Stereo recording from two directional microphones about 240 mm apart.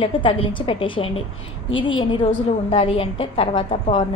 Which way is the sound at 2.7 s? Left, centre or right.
Left.